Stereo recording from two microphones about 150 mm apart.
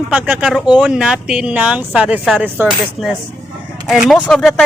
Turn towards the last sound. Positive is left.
turn(degrees=5)  # may be behind; listen again after turning